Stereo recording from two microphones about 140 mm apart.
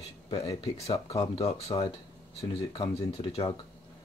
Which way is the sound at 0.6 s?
45° left (ahead or behind).